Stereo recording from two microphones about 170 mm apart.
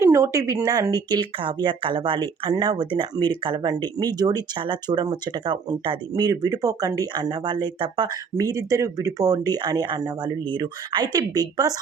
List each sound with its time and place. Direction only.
0.0 s speech: 15° right (ahead or behind)